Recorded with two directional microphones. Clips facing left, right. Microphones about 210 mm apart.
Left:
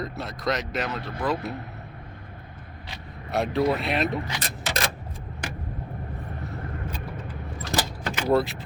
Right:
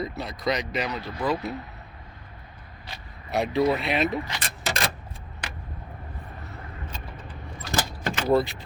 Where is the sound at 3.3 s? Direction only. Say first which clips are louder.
Right 1 dB; centre (ahead or behind).